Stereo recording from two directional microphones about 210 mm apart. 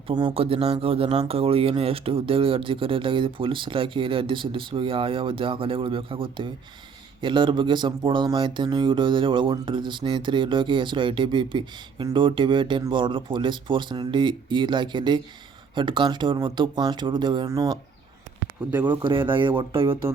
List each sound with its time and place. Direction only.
0.1 s speech: 25° right (ahead or behind)
18.9 s speech: 20° right (ahead or behind)